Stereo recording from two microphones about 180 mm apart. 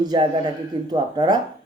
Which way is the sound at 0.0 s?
25° right (ahead or behind).